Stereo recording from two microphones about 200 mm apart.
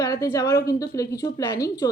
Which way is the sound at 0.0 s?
15° left (ahead or behind).